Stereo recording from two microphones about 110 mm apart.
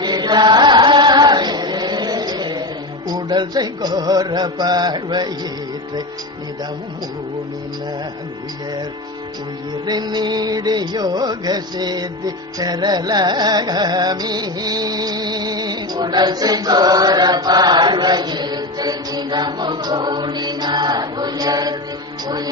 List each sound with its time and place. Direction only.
0.0 s chant: 40° right (ahead or behind)
3.1 s mantra: 40° right (ahead or behind)
9.8 s music: 35° right (ahead or behind)